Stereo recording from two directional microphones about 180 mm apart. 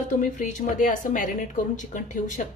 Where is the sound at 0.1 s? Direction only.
45° left (ahead or behind).